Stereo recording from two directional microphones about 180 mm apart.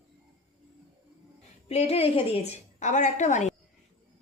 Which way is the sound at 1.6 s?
35° left (ahead or behind).